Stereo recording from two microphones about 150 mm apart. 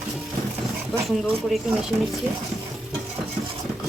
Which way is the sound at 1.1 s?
5° right (ahead or behind).